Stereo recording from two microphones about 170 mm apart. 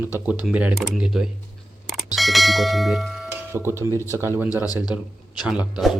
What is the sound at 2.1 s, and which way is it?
Bell, centre (ahead or behind).